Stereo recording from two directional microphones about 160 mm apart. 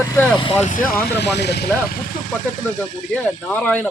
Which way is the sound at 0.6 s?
55° left (ahead or behind).